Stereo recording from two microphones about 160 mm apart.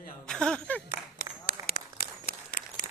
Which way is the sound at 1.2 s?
70° left (ahead or behind).